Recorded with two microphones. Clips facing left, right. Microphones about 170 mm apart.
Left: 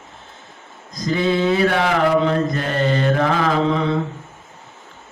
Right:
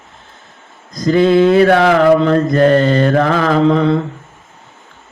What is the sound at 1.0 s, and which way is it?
Mantra, 60° right (ahead or behind).